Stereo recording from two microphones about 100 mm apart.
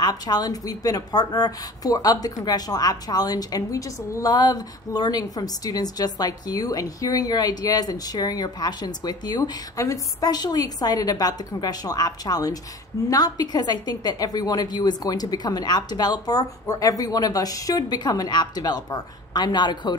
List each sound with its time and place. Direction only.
0.0 s speech: 40° left (ahead or behind)